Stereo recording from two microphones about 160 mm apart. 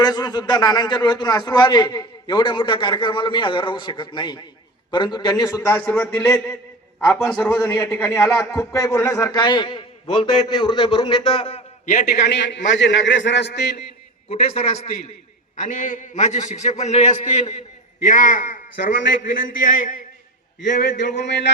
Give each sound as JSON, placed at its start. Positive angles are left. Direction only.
{"t": 0.0, "sound": "a man's voice", "side_deg": 25}
{"t": 11.9, "sound": "a man's voice", "side_deg": 55}
{"t": 12.5, "sound": "a man's voice", "side_deg": 90}
{"t": 14.3, "sound": "a man's voice", "side_deg": 40}
{"t": 15.6, "sound": "a man's voice", "side_deg": 55}
{"t": 20.7, "sound": "a man's voice", "side_deg": 90}